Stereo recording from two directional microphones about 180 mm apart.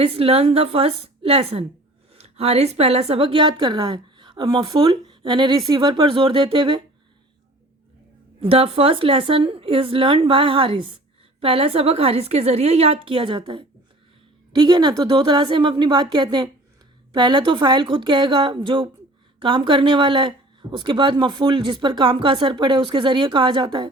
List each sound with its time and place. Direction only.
0.0 s a woman's voice: 35° right (ahead or behind)
8.4 s a woman's voice: 30° right (ahead or behind)